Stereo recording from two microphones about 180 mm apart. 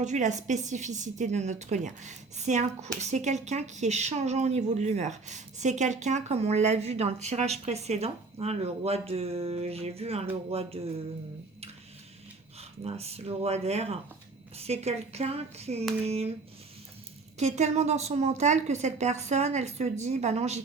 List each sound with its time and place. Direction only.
0.0 s a woman's voice: 40° right (ahead or behind)
12.5 s a woman's voice: 35° right (ahead or behind)
17.3 s a woman's voice: 40° right (ahead or behind)